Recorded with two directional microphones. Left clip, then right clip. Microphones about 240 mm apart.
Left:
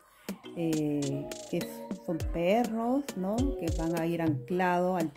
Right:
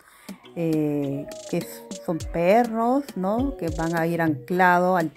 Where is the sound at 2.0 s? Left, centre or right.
Centre.